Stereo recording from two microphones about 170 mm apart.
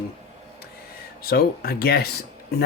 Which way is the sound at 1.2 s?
60° left (ahead or behind).